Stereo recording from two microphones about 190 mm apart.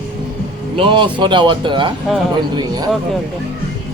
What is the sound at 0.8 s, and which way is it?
A man's voice, 25° right (ahead or behind).